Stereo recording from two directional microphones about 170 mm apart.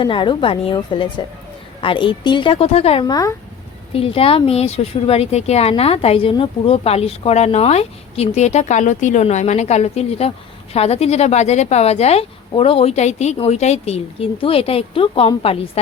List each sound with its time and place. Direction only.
0.0 s speech: 30° left (ahead or behind)
3.9 s speech: 35° left (ahead or behind)